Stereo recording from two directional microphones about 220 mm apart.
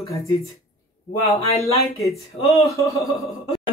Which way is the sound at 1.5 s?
30° left (ahead or behind).